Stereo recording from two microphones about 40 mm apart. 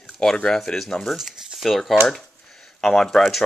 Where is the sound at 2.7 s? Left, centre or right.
Centre.